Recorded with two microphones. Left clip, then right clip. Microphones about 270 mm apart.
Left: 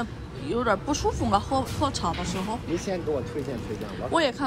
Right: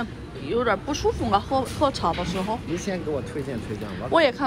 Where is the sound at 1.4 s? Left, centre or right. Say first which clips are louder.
Right 2 dB; left.